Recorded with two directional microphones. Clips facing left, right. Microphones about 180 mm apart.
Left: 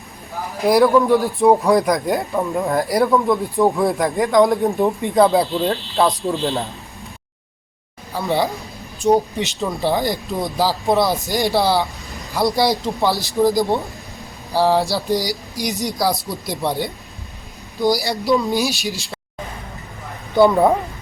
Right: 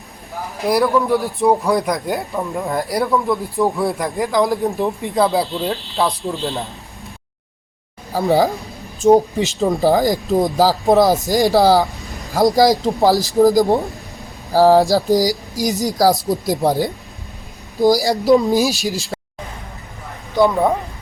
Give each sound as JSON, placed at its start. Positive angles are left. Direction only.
{"t": 0.6, "sound": "speech", "side_deg": 0}
{"t": 8.1, "sound": "speech", "side_deg": -40}
{"t": 12.0, "sound": "vehicle", "side_deg": 0}
{"t": 12.3, "sound": "speech", "side_deg": -40}
{"t": 20.3, "sound": "speech", "side_deg": 5}